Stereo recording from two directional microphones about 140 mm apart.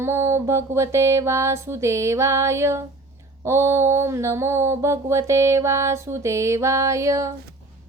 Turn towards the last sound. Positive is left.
turn(degrees=-20)  # may be behind; listen again after turning